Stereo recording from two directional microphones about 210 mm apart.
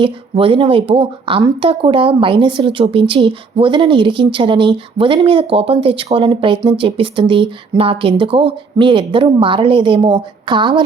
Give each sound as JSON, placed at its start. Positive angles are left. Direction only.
{"t": 0.0, "sound": "speech", "side_deg": -25}